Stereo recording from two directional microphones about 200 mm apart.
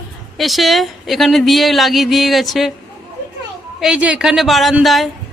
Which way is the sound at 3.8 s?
5° right (ahead or behind).